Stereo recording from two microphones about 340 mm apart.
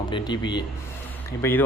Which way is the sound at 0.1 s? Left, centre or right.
Centre.